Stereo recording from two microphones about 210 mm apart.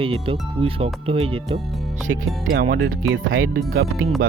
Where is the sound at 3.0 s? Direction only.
80° right.